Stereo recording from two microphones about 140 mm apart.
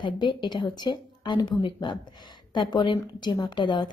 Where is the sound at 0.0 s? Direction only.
35° left (ahead or behind).